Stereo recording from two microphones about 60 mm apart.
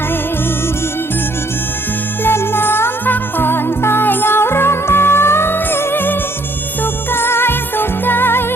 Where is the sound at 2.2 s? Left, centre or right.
Left.